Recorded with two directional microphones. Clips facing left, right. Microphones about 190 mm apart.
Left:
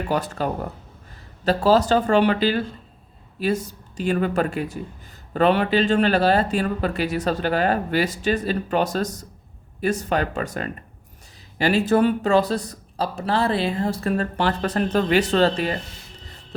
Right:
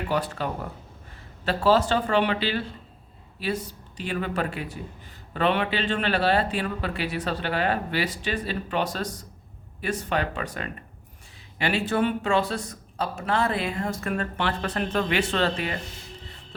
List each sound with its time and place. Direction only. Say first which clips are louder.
0.1 s speech: left 3 dB; 45° left (ahead or behind)